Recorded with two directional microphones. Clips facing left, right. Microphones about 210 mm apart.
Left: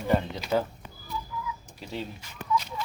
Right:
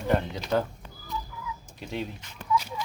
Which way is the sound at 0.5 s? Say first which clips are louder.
Even; 5° left (ahead or behind).